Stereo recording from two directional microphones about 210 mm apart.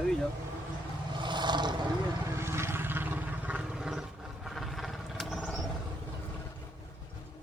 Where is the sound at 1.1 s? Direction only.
20° right (ahead or behind).